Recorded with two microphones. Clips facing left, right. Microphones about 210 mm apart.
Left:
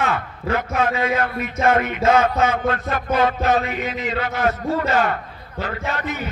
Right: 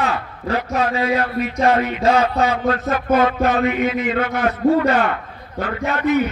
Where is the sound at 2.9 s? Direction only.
45° right (ahead or behind).